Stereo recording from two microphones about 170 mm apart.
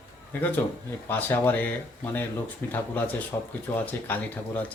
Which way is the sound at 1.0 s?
10° left (ahead or behind).